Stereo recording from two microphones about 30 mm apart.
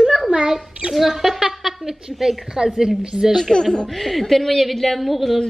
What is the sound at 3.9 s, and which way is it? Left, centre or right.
A woman's voice, centre.